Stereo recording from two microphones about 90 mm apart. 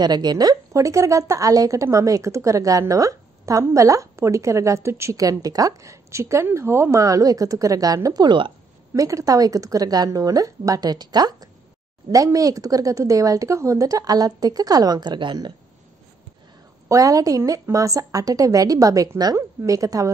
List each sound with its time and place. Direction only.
0.0 s a woman's voice: 50° right (ahead or behind)
16.9 s speech: 40° right (ahead or behind)